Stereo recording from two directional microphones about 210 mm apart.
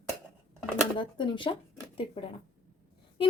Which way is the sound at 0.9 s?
20° left (ahead or behind).